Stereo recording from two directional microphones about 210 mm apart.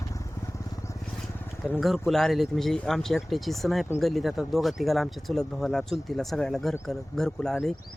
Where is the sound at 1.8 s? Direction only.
Centre (ahead or behind).